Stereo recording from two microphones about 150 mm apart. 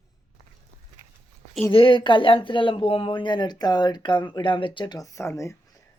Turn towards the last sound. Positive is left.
turn(degrees=20)  # may be behind; listen again after turning